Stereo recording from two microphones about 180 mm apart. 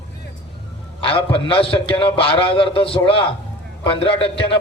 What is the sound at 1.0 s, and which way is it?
A man's voice, 30° left (ahead or behind).